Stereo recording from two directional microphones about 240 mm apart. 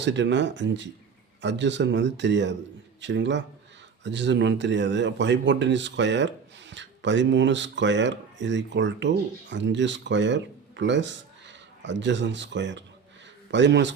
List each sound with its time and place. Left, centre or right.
0.0 s speech: right